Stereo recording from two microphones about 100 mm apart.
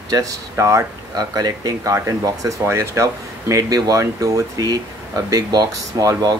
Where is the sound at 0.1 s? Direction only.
35° right (ahead or behind).